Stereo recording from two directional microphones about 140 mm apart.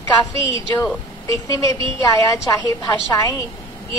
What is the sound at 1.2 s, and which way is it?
A woman's voice, 25° left (ahead or behind).